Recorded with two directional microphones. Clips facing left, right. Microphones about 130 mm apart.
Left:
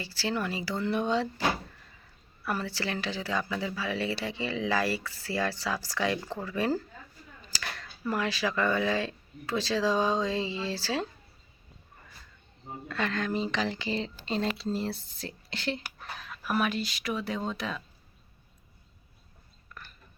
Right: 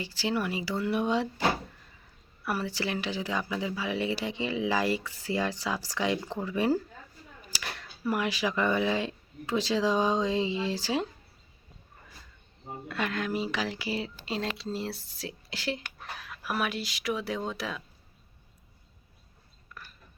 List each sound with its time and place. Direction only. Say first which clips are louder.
0.0 s speech: right 1 dB; 15° right (ahead or behind)
2.4 s speech: right 1 dB; 10° right (ahead or behind)
12.9 s speech: left 1 dB; 10° right (ahead or behind)
19.7 s a sound: even; 5° right (ahead or behind)